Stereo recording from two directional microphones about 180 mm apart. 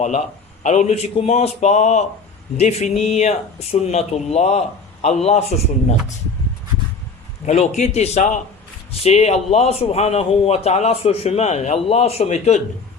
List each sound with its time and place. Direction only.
0.0 s a man's voice: 40° left (ahead or behind)
7.4 s a man's voice: 40° left (ahead or behind)